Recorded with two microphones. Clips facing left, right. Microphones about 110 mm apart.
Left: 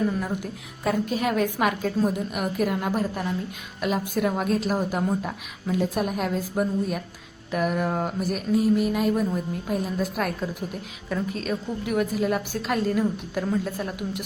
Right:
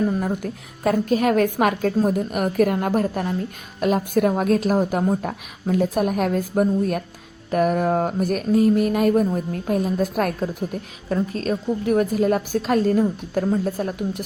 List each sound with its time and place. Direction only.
0.2 s a woman's voice: 45° right (ahead or behind)
7.5 s a woman's voice: 40° right (ahead or behind)